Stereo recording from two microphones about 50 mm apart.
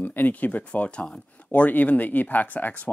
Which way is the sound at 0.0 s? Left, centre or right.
Left.